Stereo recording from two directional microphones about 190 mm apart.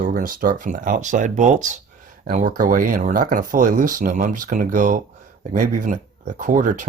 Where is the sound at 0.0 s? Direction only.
45° right (ahead or behind).